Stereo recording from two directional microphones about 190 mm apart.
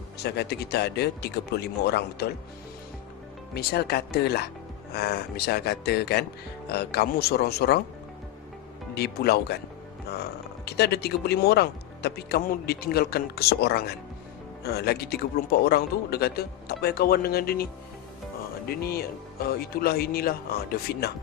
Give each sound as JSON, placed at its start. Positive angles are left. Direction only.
{"t": 0.2, "sound": "speech", "side_deg": 60}
{"t": 3.5, "sound": "speech", "side_deg": 55}
{"t": 9.0, "sound": "speech", "side_deg": 55}
{"t": 10.7, "sound": "speech", "side_deg": 60}
{"t": 18.7, "sound": "speech", "side_deg": 55}